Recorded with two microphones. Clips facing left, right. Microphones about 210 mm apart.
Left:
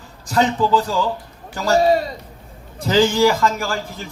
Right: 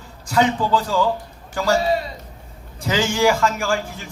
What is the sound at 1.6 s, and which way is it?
A man's voice, 40° left (ahead or behind).